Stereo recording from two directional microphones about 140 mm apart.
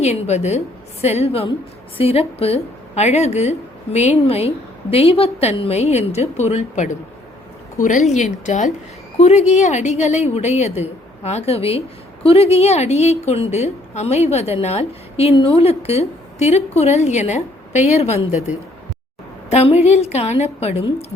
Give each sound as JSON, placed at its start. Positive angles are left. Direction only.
{"t": 0.0, "sound": "a woman's voice", "side_deg": 50}